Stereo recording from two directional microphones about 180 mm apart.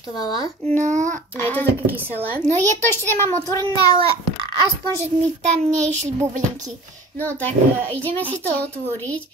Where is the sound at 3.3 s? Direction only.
20° left (ahead or behind).